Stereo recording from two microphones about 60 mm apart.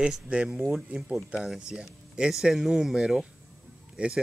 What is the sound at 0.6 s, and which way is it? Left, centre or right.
Speech, centre.